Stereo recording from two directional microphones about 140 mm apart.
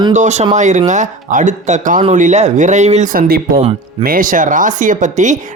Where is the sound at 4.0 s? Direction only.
85° right; by 5.3 s 60° right (ahead or behind).